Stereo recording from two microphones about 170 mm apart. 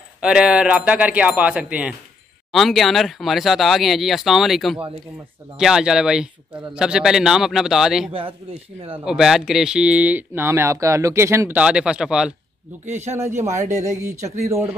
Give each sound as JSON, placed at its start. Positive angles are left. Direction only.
{"t": 0.2, "sound": "speech", "side_deg": -5}
{"t": 8.1, "sound": "a man's voice", "side_deg": -35}
{"t": 9.0, "sound": "speech", "side_deg": -5}
{"t": 12.9, "sound": "speech", "side_deg": -40}
{"t": 13.5, "sound": "speech", "side_deg": -15}